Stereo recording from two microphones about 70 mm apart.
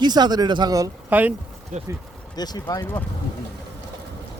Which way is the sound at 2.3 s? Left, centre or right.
Left.